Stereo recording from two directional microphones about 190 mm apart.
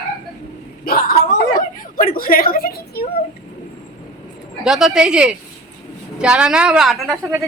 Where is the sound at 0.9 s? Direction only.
50° left (ahead or behind).